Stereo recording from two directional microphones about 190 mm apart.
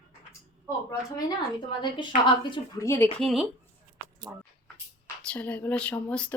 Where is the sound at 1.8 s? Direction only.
25° left (ahead or behind); by 3.4 s centre (ahead or behind).